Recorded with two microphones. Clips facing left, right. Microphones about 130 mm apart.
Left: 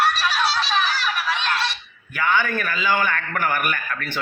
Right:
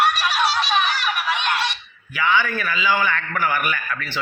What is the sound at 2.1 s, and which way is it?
Speech, 50° left (ahead or behind).